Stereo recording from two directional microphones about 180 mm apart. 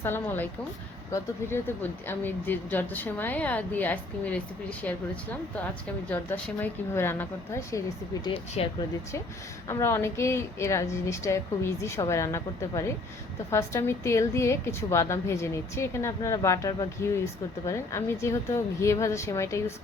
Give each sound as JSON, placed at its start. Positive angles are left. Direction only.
{"t": 0.0, "sound": "speech", "side_deg": 10}
{"t": 6.1, "sound": "speech", "side_deg": 10}
{"t": 8.2, "sound": "speech", "side_deg": 30}
{"t": 9.6, "sound": "speech", "side_deg": 15}